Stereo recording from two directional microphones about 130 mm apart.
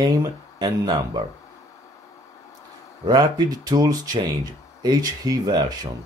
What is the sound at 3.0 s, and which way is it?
Speech, 30° right (ahead or behind).